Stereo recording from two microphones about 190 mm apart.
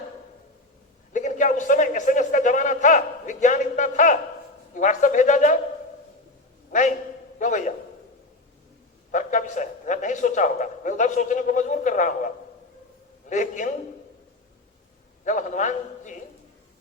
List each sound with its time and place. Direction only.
1.1 s a sound: 40° left (ahead or behind)
4.7 s a man's voice: 40° left (ahead or behind)
6.7 s a man's voice: 40° left (ahead or behind)
9.1 s a man's voice: 40° left (ahead or behind)
15.2 s a man's voice: 40° left (ahead or behind)